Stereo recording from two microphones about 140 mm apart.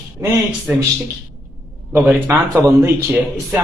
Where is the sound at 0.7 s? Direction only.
15° right (ahead or behind).